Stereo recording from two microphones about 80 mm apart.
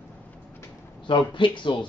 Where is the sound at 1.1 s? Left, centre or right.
Left.